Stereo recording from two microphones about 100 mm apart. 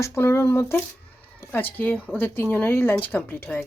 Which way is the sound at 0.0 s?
25° left (ahead or behind).